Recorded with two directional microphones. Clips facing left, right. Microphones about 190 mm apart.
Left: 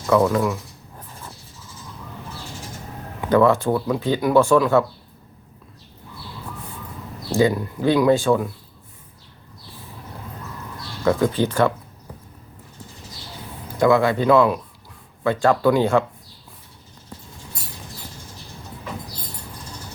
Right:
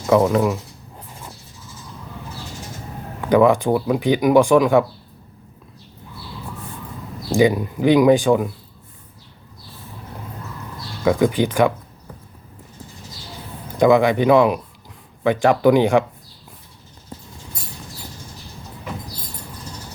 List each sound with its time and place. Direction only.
0.0 s writing: 20° right (ahead or behind)
3.2 s speech: 15° right (ahead or behind)
7.3 s speech: 15° right (ahead or behind)
11.0 s speech: 15° right (ahead or behind)
13.7 s speech: 20° right (ahead or behind)